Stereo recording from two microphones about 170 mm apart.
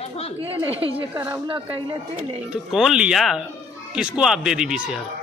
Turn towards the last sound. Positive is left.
turn(degrees=-5)  # may be behind; listen again after turning